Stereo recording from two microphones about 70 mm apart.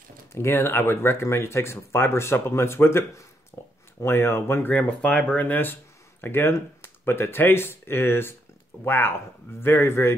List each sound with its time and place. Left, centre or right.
0.3 s speech: left
3.5 s a sound: left
4.0 s speech: left
4.7 s speech: centre; by 10.1 s left